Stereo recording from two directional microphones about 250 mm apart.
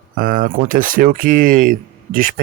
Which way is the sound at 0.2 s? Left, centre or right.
Right.